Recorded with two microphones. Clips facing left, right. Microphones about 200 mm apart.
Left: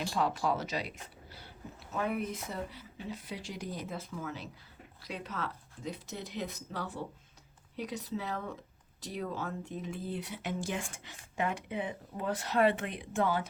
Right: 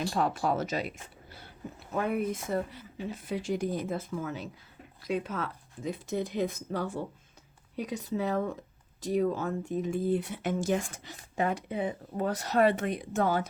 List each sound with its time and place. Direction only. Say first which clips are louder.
0.1 s speech: even; 50° right (ahead or behind)